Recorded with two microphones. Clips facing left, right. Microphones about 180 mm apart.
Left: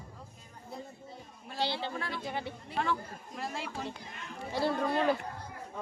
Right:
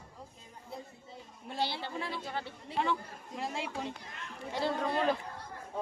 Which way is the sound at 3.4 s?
20° right (ahead or behind).